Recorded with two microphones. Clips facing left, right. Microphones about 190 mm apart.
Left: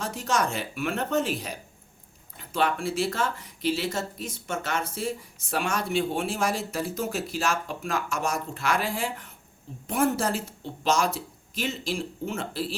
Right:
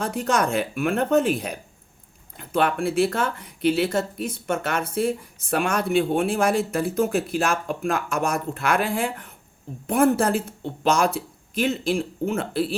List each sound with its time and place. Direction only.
0.0 s speech: 55° right (ahead or behind)